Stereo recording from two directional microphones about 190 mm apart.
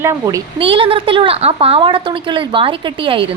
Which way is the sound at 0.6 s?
30° right (ahead or behind).